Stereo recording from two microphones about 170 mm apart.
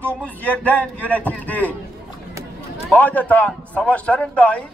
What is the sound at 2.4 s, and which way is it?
Run, 20° right (ahead or behind).